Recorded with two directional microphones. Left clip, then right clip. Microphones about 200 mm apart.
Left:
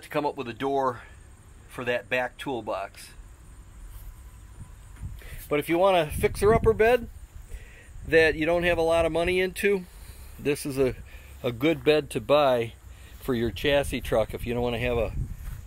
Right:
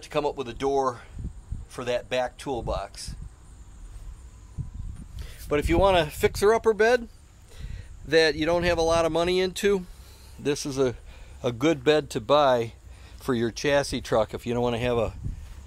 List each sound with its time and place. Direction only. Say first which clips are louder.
0.0 s speech: right 1 dB; centre (ahead or behind)
5.2 s speech: right 1 dB; 15° right (ahead or behind)
8.1 s a man's voice: even; 10° right (ahead or behind)